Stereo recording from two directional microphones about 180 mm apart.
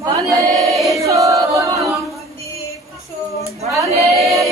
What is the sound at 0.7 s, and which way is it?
Choir, centre (ahead or behind).